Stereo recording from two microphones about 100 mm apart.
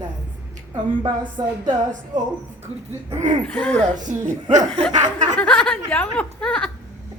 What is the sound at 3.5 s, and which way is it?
Speech, 10° left (ahead or behind).